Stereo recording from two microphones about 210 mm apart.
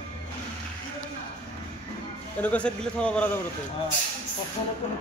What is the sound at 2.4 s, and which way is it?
Speech, 5° left (ahead or behind).